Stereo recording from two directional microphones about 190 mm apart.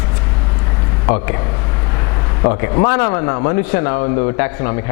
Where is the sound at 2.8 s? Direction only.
15° left (ahead or behind).